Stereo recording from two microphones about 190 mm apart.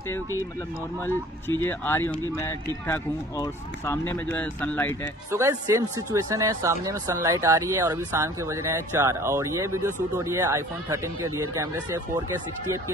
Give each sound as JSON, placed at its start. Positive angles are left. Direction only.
{"t": 1.6, "sound": "speech", "side_deg": 10}
{"t": 5.3, "sound": "speech", "side_deg": -15}